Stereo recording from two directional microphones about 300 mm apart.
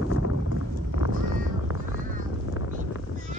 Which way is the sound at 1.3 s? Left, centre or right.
Left.